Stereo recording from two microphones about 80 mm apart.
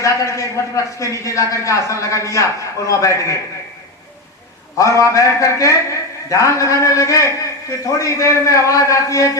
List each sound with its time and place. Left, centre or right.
0.0 s a man's voice: left
4.9 s a man's voice: left